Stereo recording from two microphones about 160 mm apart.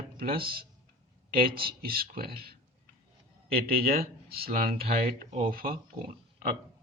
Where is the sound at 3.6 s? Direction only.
70° right (ahead or behind).